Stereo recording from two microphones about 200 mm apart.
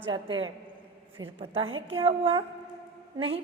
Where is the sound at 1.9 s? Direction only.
30° right (ahead or behind).